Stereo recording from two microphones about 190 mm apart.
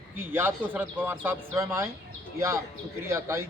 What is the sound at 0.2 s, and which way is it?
A man's voice, 10° right (ahead or behind).